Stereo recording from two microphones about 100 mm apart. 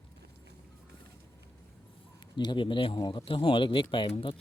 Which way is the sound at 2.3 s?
50° left (ahead or behind).